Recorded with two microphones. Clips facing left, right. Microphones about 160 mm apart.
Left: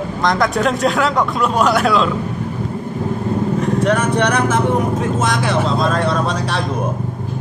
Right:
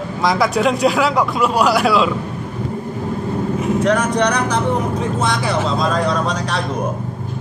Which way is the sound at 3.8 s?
5° left (ahead or behind).